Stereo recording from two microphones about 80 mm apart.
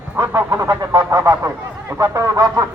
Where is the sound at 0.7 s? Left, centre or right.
Right.